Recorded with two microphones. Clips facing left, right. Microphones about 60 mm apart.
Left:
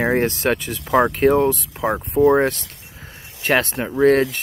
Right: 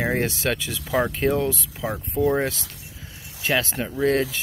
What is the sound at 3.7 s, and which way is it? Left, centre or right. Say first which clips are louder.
Speech: left 5 dB; left.